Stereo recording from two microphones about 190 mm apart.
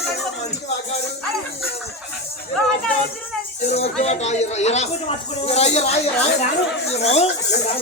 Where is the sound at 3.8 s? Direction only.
35° left (ahead or behind).